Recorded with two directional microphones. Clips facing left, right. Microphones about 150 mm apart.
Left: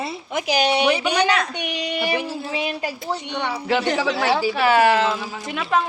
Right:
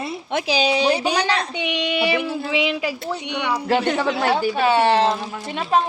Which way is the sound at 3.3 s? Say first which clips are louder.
Right 3 dB; 65° right (ahead or behind).